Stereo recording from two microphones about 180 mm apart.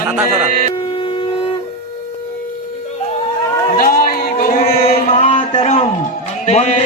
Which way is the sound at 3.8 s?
50° left (ahead or behind).